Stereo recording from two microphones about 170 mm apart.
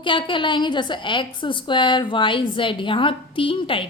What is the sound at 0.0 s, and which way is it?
A woman's voice, 30° left (ahead or behind).